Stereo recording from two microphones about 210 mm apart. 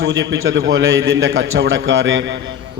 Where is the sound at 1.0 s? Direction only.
60° right (ahead or behind).